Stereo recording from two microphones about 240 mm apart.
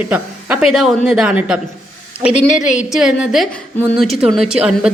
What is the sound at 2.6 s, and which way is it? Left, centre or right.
Speech, left.